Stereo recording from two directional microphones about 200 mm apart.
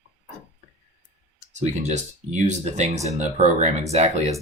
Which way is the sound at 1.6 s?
35° right (ahead or behind).